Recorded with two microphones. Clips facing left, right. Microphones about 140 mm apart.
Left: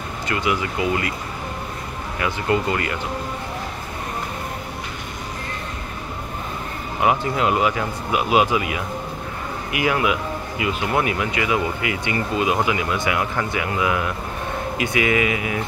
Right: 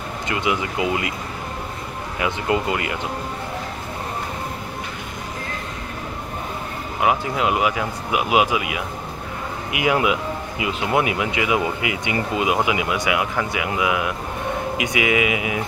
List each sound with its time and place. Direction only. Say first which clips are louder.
0.3 s speech: even; 20° right (ahead or behind)
2.1 s speech: even; 15° right (ahead or behind)
7.0 s speech: left 1 dB; 5° right (ahead or behind)